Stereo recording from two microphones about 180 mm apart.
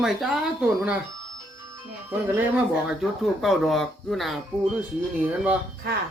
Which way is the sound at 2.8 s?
Centre (ahead or behind).